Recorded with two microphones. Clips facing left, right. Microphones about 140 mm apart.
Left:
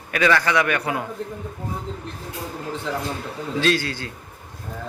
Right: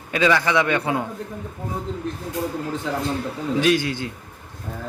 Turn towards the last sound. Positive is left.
turn(degrees=-20)  # may be behind; listen again after turning